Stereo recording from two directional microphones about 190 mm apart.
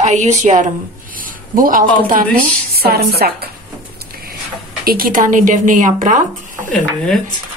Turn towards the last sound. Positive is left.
turn(degrees=5)  # may be behind; listen again after turning